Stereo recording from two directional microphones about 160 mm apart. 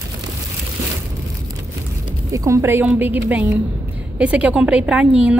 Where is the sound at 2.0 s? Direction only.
20° right (ahead or behind).